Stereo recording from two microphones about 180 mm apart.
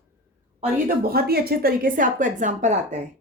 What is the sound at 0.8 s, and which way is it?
A woman's voice, 60° right (ahead or behind).